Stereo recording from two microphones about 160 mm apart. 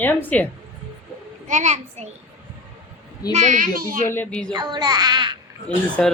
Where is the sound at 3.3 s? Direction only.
50° right (ahead or behind).